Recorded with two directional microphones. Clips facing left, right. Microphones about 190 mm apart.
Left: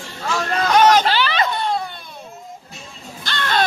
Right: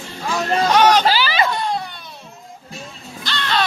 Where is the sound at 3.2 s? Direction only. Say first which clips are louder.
Left 1 dB; 50° left (ahead or behind).